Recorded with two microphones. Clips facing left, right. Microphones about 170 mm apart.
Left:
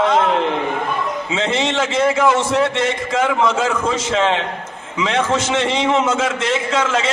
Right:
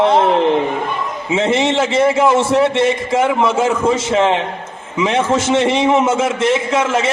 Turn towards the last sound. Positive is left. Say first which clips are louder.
# right 3 dB
turn(degrees=-25)  # may be behind; listen again after turning